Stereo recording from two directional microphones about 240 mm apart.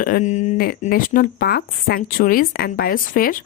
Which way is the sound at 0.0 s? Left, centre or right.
Left.